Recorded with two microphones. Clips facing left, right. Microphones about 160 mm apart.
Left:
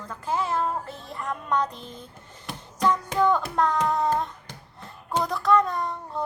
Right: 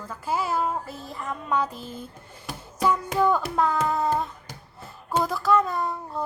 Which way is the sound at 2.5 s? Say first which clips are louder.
Even; 5° right (ahead or behind).